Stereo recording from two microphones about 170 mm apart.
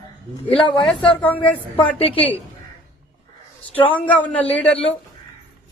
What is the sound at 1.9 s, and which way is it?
Speech, 35° left (ahead or behind).